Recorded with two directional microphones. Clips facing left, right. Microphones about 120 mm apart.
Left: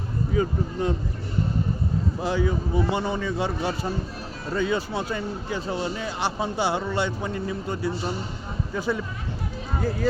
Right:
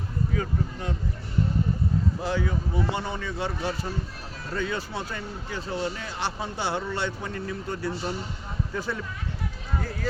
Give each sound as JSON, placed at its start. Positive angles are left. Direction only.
{"t": 0.3, "sound": "speech", "side_deg": 25}
{"t": 2.2, "sound": "speech", "side_deg": 15}